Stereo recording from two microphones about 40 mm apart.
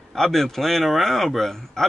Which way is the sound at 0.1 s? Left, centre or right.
Centre.